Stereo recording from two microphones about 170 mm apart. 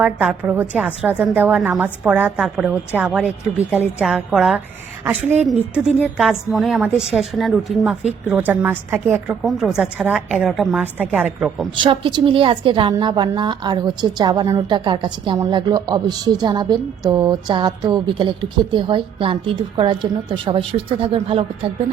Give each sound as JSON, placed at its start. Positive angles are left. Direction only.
{"t": 0.0, "sound": "a woman's voice", "side_deg": -5}
{"t": 11.8, "sound": "a woman's voice", "side_deg": -30}